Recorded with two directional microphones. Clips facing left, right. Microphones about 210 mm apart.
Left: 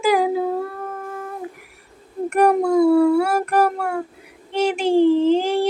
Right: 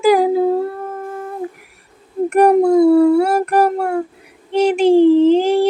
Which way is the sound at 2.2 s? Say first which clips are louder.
Right 5 dB; 35° right (ahead or behind).